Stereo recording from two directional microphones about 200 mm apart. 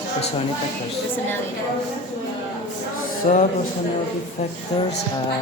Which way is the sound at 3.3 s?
35° left (ahead or behind).